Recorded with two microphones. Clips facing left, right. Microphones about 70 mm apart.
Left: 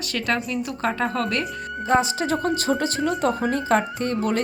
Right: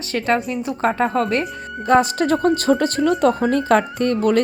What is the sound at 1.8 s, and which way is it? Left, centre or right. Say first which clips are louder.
Speech: right 5 dB; right.